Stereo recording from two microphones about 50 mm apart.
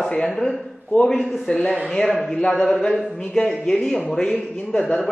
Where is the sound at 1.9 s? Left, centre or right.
Centre.